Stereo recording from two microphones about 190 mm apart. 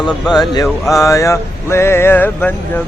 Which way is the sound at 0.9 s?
15° left (ahead or behind).